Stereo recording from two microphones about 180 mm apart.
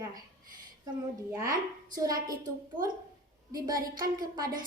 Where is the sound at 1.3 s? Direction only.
20° right (ahead or behind).